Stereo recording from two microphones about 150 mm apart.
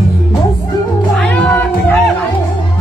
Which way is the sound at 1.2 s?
10° left (ahead or behind).